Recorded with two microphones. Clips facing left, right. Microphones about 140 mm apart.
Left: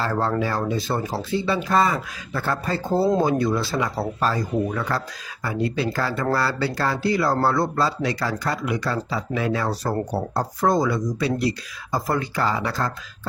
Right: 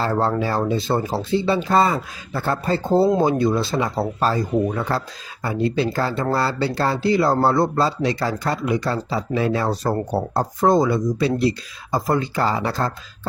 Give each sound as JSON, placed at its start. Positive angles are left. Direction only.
{"t": 0.0, "sound": "speech", "side_deg": -30}
{"t": 3.0, "sound": "speech", "side_deg": 0}
{"t": 3.2, "sound": "speech", "side_deg": -25}